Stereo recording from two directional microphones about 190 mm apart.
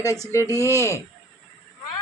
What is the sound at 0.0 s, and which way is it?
A woman's voice, 15° left (ahead or behind).